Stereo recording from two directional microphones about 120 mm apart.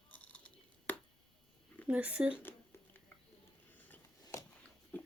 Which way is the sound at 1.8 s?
10° right (ahead or behind).